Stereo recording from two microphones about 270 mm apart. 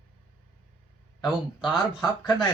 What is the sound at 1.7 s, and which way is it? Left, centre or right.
Speech, centre.